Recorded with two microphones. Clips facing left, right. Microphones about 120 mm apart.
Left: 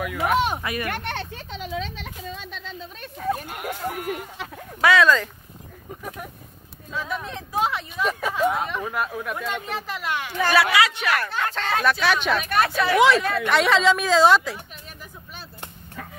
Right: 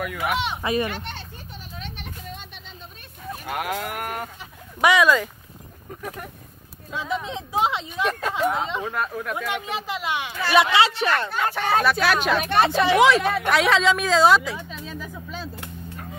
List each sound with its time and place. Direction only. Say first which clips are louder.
0.0 s speech: left 3 dB; centre (ahead or behind)
0.6 s speech: right 5 dB; 25° right (ahead or behind)
0.8 s a sound: left 3 dB; 60° left (ahead or behind); by 1.8 s 90° left
3.2 s livestock: left 10 dB; 75° left (ahead or behind)
3.5 s sheep: right 2 dB; 90° right; by 4.3 s 65° right (ahead or behind)
4.8 s speech: even; 15° right (ahead or behind)
6.9 s speech: right 2 dB; 15° right (ahead or behind)
8.1 s speech: even; 10° left (ahead or behind)
8.5 s speech: even; 20° right (ahead or behind)
8.8 s speech: even; 5° left (ahead or behind)
9.5 s speech: right 1 dB; 15° right (ahead or behind)
11.2 s speech: right 2 dB; centre (ahead or behind)
12.4 s speech: right 4 dB; 25° right (ahead or behind)
12.9 s speech: left 1 dB; centre (ahead or behind)